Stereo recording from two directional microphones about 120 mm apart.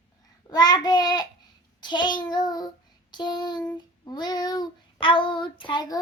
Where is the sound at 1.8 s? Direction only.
40° left (ahead or behind).